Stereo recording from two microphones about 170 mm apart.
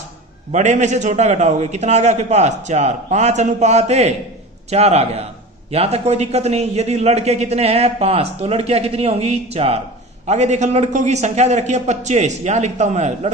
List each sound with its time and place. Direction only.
0.5 s a man's voice: 45° right (ahead or behind)